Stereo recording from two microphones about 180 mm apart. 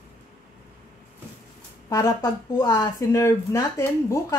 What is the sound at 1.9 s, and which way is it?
Speech, 15° left (ahead or behind).